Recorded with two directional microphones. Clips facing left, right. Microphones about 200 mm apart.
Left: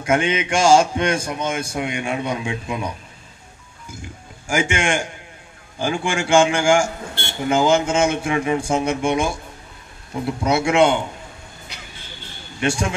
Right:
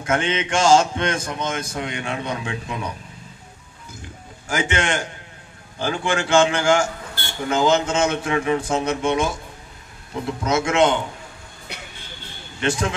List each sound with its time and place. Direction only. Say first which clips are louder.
0.0 s a man's voice: left 3 dB; 10° left (ahead or behind)
4.5 s a man's voice: left 2 dB; 10° left (ahead or behind)
10.4 s a man's voice: left 2 dB; 10° left (ahead or behind)
11.7 s vehicle: right 6 dB; 60° right (ahead or behind)
12.5 s a man's voice: left 1 dB; 10° left (ahead or behind)